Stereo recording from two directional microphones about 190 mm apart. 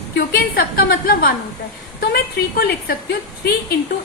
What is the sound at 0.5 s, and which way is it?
A woman's voice, 50° left (ahead or behind).